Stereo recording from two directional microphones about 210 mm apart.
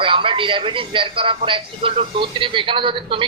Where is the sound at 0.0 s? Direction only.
25° right (ahead or behind).